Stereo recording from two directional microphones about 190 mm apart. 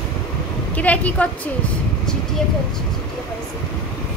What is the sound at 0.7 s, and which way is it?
Speech, 10° left (ahead or behind).